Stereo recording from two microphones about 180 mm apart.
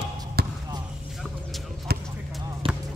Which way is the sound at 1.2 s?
Centre (ahead or behind).